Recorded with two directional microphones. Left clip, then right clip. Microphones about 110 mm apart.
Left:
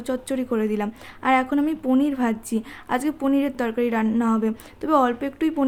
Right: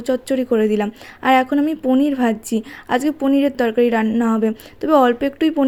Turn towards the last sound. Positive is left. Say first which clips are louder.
# right 6 dB
turn(degrees=-35)  # may be behind; listen again after turning